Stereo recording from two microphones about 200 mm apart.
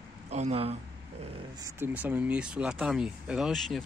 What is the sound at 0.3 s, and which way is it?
Speech, 35° right (ahead or behind).